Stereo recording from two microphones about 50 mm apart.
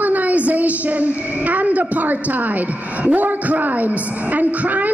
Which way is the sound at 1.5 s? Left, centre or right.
Right.